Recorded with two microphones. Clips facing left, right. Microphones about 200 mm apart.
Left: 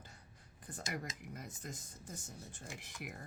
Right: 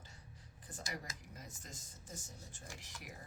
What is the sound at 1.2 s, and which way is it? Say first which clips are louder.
Speech: left 6 dB; 60° left (ahead or behind).